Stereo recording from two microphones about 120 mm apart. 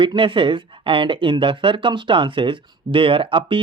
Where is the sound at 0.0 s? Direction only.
45° right (ahead or behind).